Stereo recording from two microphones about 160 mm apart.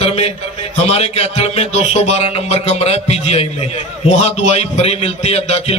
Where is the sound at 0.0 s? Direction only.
40° left (ahead or behind).